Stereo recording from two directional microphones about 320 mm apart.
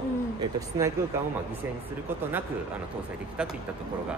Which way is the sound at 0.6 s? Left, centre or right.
Centre.